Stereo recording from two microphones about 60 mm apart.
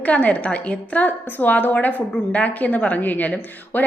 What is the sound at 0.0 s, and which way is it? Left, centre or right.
A woman's voice, left.